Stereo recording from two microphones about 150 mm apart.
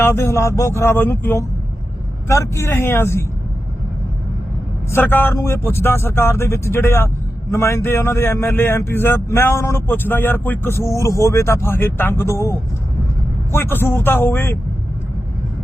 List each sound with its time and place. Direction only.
0.0 s speech: 15° left (ahead or behind)
4.9 s speech: 15° left (ahead or behind)